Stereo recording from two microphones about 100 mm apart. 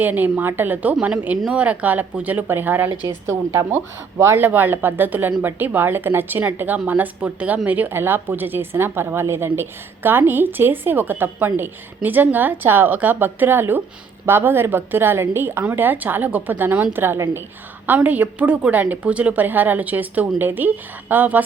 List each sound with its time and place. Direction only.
0.0 s a woman's voice: 15° right (ahead or behind)